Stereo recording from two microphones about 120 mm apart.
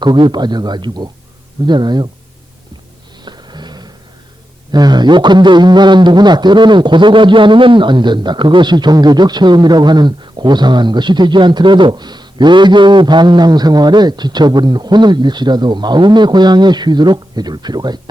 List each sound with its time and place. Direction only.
0.0 s a man's voice: 40° right (ahead or behind)
3.2 s a sound: 35° right (ahead or behind)
4.7 s a man's voice: 35° right (ahead or behind)